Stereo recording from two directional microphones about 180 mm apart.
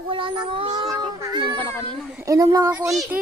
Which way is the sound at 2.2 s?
20° right (ahead or behind).